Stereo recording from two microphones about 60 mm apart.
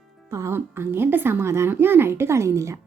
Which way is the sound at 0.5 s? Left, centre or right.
Right.